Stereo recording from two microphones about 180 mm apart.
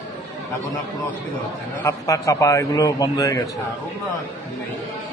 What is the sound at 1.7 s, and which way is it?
A man's voice, 15° left (ahead or behind).